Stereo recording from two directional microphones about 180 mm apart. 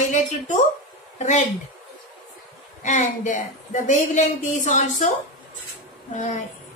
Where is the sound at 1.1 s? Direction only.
40° left (ahead or behind).